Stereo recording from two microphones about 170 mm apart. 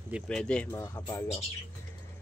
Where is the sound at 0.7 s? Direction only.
20° left (ahead or behind).